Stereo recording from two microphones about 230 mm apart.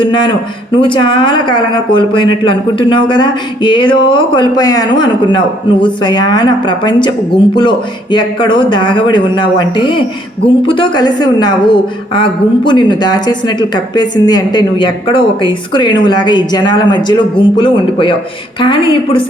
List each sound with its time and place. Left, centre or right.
0.0 s a woman's voice: left